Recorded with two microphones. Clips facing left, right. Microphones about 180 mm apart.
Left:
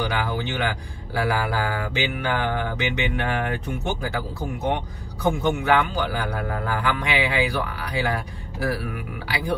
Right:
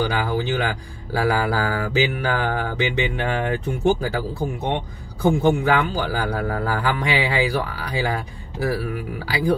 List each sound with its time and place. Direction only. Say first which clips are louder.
0.0 s speech: right 3 dB; 35° right (ahead or behind)
5.4 s speech: right 2 dB; 35° right (ahead or behind)